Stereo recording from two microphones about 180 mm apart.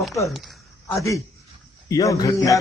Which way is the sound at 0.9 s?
15° left (ahead or behind).